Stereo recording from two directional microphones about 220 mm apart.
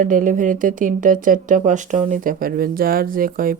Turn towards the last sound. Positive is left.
turn(degrees=-40)  # may be behind; listen again after turning